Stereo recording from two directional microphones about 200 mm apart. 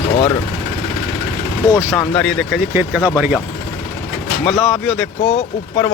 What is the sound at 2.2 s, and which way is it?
Speech, centre (ahead or behind).